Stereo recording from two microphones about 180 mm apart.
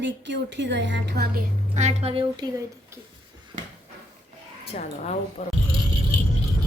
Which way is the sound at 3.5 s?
40° right (ahead or behind).